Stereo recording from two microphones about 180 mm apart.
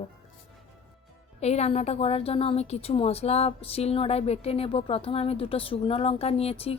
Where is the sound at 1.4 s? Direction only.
35° left (ahead or behind).